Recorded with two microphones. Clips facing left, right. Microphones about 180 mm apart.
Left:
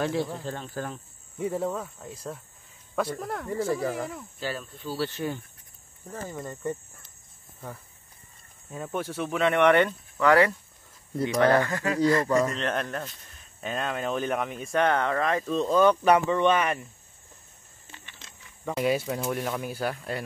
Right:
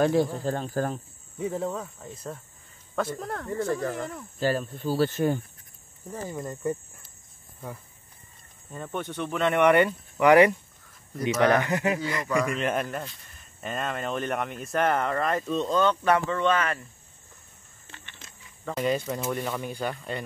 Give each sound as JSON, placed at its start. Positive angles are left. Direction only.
{"t": 0.0, "sound": "speech", "side_deg": -45}
{"t": 1.4, "sound": "speech", "side_deg": 5}
{"t": 4.4, "sound": "speech", "side_deg": -45}
{"t": 6.2, "sound": "speech", "side_deg": -15}
{"t": 8.7, "sound": "speech", "side_deg": 5}
{"t": 10.1, "sound": "speech", "side_deg": -15}
{"t": 18.7, "sound": "speech", "side_deg": 5}